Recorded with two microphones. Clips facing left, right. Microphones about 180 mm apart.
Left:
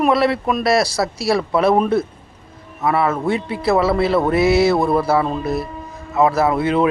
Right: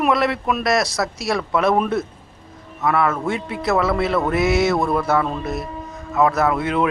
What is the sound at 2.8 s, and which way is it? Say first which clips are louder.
Speech: left 1 dB; 5° left (ahead or behind).